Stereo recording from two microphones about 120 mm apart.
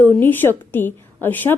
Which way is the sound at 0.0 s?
15° left (ahead or behind).